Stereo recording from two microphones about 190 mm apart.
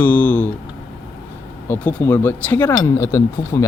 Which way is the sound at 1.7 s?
10° left (ahead or behind).